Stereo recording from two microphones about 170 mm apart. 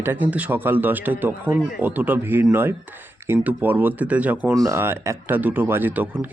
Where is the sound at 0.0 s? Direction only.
10° right (ahead or behind).